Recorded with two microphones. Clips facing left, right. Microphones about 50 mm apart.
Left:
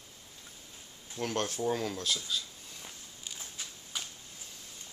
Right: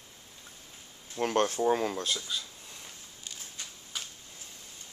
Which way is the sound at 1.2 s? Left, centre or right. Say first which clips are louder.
Right 6 dB; right.